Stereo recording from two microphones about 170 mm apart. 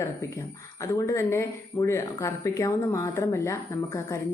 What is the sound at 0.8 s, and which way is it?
A woman's voice, 20° left (ahead or behind).